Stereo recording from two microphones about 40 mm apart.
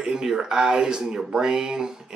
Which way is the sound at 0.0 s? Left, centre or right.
Centre.